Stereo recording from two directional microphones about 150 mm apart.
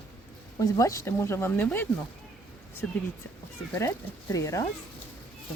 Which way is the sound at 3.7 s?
20° left (ahead or behind).